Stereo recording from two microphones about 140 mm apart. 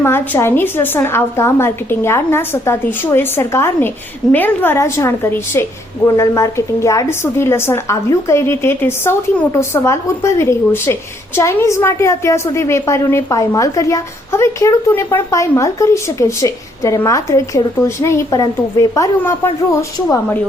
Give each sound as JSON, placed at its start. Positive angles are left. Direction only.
{"t": 0.0, "sound": "a woman's voice", "side_deg": 15}